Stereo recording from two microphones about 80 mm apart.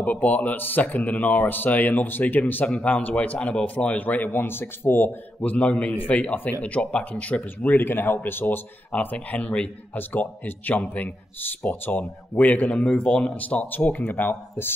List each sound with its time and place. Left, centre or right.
0.0 s speech: centre